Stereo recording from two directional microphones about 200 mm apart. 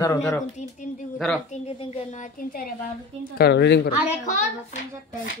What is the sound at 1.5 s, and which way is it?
Speech, 30° left (ahead or behind).